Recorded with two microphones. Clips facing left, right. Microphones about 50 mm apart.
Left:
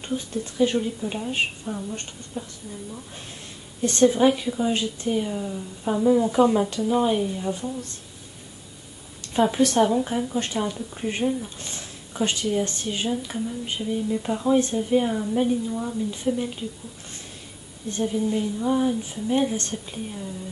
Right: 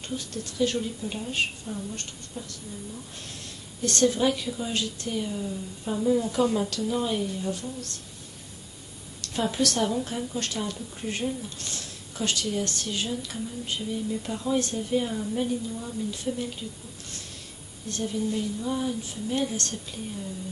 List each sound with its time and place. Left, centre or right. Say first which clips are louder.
0.1 s speech: left 6 dB; left
3.8 s speech: left 5 dB; left
9.2 s speech: left 6 dB; left
17.8 s speech: left 4 dB; left